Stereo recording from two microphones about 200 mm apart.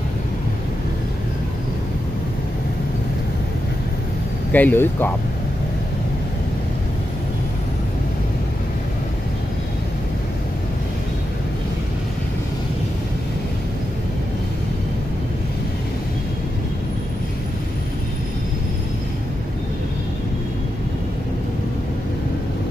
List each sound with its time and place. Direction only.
4.5 s speech: 10° left (ahead or behind)